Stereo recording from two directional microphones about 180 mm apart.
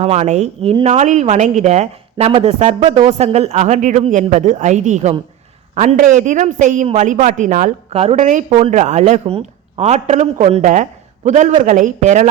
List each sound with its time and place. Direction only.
0.0 s speech: 40° right (ahead or behind)
2.8 s speech: 25° right (ahead or behind)
3.1 s a woman's voice: 35° right (ahead or behind)